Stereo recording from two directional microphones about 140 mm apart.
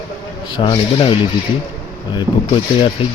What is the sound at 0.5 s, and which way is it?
Speech, 40° left (ahead or behind).